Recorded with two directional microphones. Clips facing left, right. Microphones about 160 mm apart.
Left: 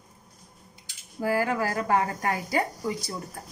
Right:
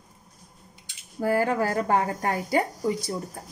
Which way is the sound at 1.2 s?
35° right (ahead or behind).